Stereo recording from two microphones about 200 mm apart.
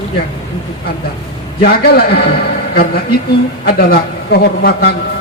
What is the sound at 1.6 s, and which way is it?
Speech, 50° left (ahead or behind).